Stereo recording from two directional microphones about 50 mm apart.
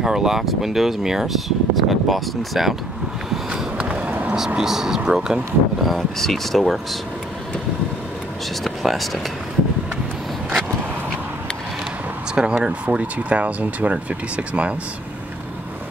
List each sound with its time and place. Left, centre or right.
0.0 s speech: centre
3.7 s a sound: right
4.6 s speech: centre
8.6 s speech: centre
12.4 s speech: centre